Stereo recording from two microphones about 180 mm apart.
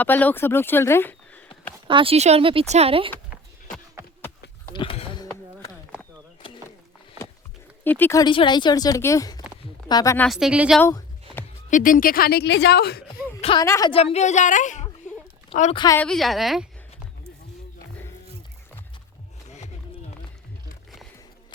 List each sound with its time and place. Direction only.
0.0 s speech: 10° left (ahead or behind)
1.9 s speech: 30° right (ahead or behind)
4.7 s a sound: 30° left (ahead or behind)
7.9 s speech: 10° left (ahead or behind)
8.2 s a woman's voice: 25° left (ahead or behind)
10.2 s speech: centre (ahead or behind)
10.8 s a sound: 15° left (ahead or behind)
11.7 s speech: 50° left (ahead or behind)
13.4 s a woman's voice: 30° left (ahead or behind)
13.9 s a woman's voice: 35° left (ahead or behind)
15.7 s a woman's voice: 25° left (ahead or behind)
16.0 s speech: 5° left (ahead or behind)
19.5 s a sound: 40° left (ahead or behind)